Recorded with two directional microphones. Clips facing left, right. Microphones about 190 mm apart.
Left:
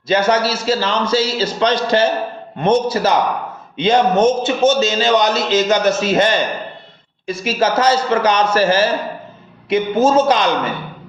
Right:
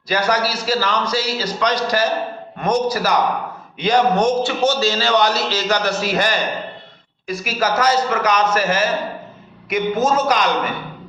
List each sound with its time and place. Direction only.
0.1 s a man's voice: 25° left (ahead or behind)